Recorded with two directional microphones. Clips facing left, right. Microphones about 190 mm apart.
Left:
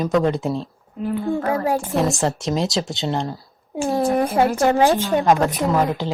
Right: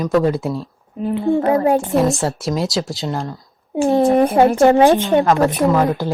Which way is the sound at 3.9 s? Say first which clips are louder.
Right 5 dB; 25° right (ahead or behind).